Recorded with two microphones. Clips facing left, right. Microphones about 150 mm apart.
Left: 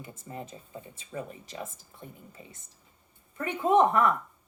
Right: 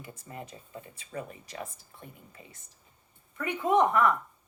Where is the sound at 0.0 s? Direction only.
30° left (ahead or behind).